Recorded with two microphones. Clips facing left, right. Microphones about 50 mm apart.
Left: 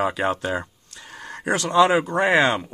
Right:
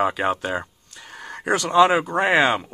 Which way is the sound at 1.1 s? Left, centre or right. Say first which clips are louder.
Right 1 dB; centre.